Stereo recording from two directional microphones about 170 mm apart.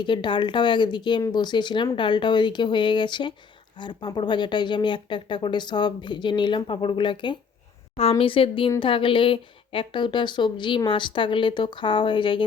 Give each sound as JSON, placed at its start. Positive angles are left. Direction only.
{"t": 0.0, "sound": "speech", "side_deg": 25}